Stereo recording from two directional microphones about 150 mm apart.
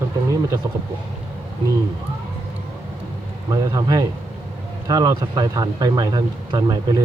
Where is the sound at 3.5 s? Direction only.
25° right (ahead or behind).